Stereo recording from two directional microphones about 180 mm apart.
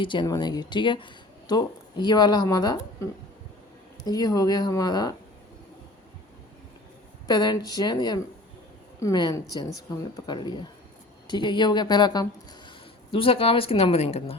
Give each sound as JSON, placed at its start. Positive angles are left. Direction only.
{"t": 0.0, "sound": "speech", "side_deg": 25}
{"t": 4.0, "sound": "speech", "side_deg": 20}
{"t": 7.3, "sound": "speech", "side_deg": 20}